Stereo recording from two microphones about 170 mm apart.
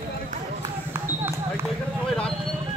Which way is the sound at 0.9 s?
15° right (ahead or behind).